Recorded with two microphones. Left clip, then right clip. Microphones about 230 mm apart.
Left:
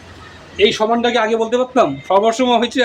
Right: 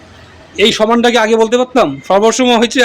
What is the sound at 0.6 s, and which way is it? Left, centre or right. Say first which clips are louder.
Speech: right 4 dB; right.